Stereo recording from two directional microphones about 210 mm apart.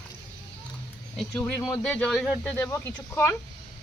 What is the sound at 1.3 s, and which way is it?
Speech, 10° left (ahead or behind).